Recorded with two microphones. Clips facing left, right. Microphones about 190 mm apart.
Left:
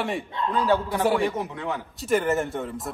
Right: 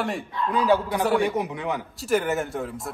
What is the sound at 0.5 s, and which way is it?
Speech, 15° right (ahead or behind).